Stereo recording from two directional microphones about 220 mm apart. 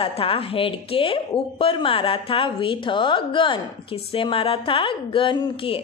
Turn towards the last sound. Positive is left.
turn(degrees=25)  # may be behind; listen again after turning